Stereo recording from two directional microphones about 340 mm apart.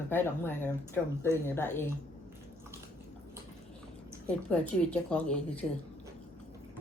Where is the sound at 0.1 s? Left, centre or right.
Centre.